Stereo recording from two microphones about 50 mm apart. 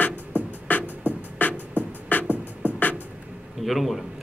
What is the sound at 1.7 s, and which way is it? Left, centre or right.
Beatboxing, right.